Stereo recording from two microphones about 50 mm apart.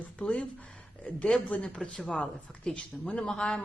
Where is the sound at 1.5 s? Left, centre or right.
Centre.